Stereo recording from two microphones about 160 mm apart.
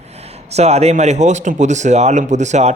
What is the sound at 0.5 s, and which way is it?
Speech, 40° right (ahead or behind).